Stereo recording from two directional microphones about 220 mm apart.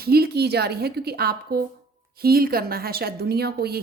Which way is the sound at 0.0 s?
45° right (ahead or behind).